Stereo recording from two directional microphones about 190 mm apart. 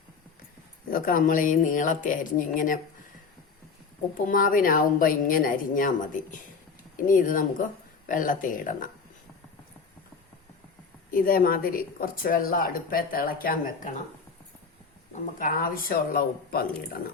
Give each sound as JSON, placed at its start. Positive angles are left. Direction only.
{"t": 0.9, "sound": "speech", "side_deg": 45}
{"t": 4.3, "sound": "speech", "side_deg": 45}
{"t": 11.1, "sound": "speech", "side_deg": 45}
{"t": 15.1, "sound": "speech", "side_deg": 45}